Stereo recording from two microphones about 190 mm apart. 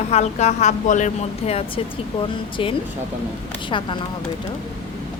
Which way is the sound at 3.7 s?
25° left (ahead or behind).